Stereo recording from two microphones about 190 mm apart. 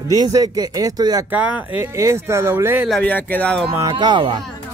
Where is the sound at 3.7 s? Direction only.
20° right (ahead or behind).